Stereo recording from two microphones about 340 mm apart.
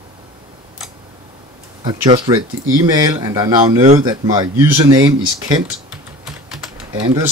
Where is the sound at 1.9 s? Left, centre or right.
Centre.